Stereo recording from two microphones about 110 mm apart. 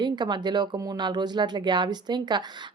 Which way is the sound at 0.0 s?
40° right (ahead or behind).